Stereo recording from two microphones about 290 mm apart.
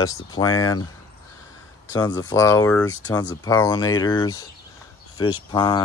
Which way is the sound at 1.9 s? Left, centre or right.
Centre.